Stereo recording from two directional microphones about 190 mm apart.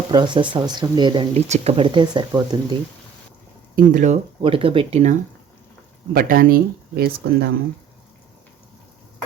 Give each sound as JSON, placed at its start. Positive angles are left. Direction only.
{"t": 0.1, "sound": "speech", "side_deg": -25}
{"t": 1.3, "sound": "speech", "side_deg": -35}
{"t": 3.8, "sound": "speech", "side_deg": -40}
{"t": 6.1, "sound": "speech", "side_deg": -50}